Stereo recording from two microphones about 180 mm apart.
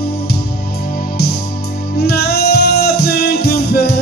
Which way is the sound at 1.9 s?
60° left (ahead or behind).